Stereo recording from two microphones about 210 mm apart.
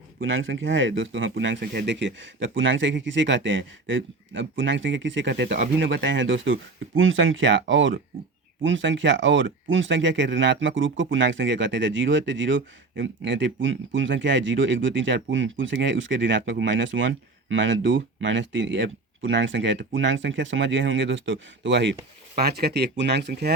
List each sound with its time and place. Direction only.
0.2 s speech: 70° right (ahead or behind); by 23.6 s 50° right (ahead or behind)